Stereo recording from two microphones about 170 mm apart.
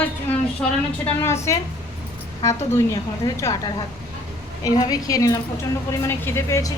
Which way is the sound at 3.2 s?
20° left (ahead or behind).